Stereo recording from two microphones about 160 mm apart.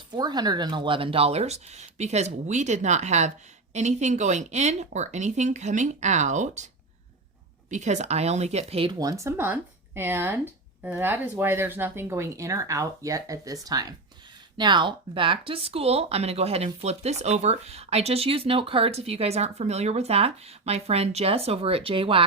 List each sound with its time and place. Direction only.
0.1 s speech: 25° right (ahead or behind); by 6.7 s 50° right (ahead or behind)
7.7 s speech: 50° right (ahead or behind)
9.0 s speech: 20° right (ahead or behind)